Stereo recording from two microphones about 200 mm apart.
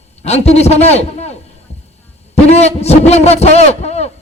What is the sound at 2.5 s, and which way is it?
A man's voice, 30° left (ahead or behind).